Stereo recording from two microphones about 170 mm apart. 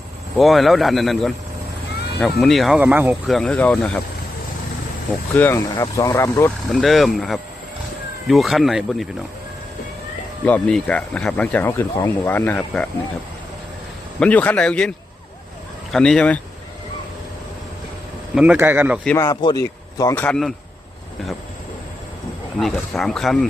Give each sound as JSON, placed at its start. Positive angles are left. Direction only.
{"t": 0.3, "sound": "speech", "side_deg": 0}
{"t": 2.4, "sound": "speech", "side_deg": 0}
{"t": 3.2, "sound": "speech", "side_deg": 5}
{"t": 5.3, "sound": "speech", "side_deg": 15}
{"t": 6.7, "sound": "speech", "side_deg": 0}
{"t": 10.4, "sound": "speech", "side_deg": 10}
{"t": 14.2, "sound": "speech", "side_deg": 10}
{"t": 18.3, "sound": "speech", "side_deg": -10}
{"t": 19.1, "sound": "speech", "side_deg": 20}
{"t": 20.2, "sound": "speech", "side_deg": 5}
{"t": 22.6, "sound": "speech", "side_deg": 0}